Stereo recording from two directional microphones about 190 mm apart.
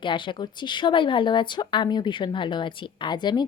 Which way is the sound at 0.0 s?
25° left (ahead or behind).